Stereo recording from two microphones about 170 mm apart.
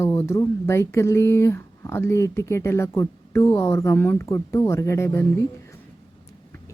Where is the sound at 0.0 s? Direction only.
15° left (ahead or behind).